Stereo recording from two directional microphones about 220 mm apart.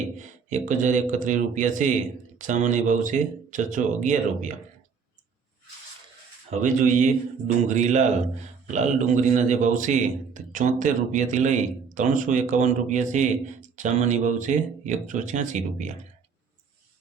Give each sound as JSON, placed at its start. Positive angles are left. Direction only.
{"t": 0.2, "sound": "a man's voice", "side_deg": -35}
{"t": 6.5, "sound": "a man's voice", "side_deg": -35}